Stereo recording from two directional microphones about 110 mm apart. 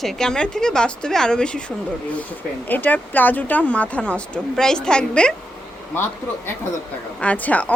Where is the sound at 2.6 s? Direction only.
15° left (ahead or behind).